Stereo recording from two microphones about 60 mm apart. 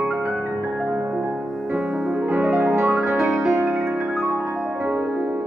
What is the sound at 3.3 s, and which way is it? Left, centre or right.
Music, centre.